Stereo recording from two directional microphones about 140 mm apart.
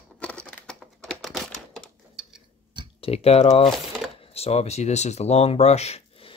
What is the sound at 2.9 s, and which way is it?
Speech, 45° left (ahead or behind).